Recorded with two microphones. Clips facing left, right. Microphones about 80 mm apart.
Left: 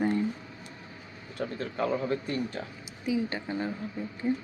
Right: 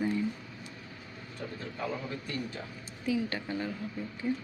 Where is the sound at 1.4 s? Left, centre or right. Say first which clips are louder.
Left 7 dB; left.